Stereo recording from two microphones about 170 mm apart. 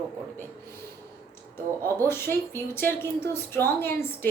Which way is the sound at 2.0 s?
15° left (ahead or behind).